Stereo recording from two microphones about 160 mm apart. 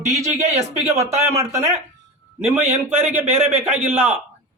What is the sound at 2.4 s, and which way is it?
A man's voice, 15° right (ahead or behind).